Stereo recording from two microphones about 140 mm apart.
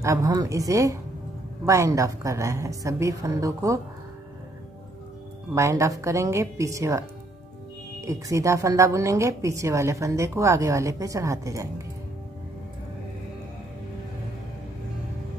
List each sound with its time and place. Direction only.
0.0 s a woman's voice: 25° right (ahead or behind)
5.5 s a woman's voice: 20° right (ahead or behind)